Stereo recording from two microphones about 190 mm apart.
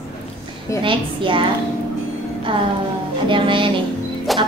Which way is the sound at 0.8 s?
25° right (ahead or behind).